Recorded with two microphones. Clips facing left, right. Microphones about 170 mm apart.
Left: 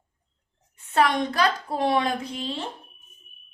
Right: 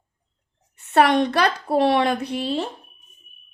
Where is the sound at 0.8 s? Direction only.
70° right (ahead or behind).